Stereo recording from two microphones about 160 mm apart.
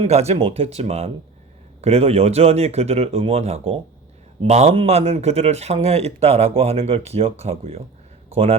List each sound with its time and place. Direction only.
0.0 s speech: 40° right (ahead or behind)